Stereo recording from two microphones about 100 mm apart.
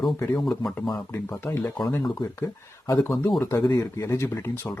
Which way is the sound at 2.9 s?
30° left (ahead or behind).